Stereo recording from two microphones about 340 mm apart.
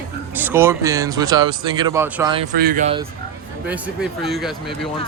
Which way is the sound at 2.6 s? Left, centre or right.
Right.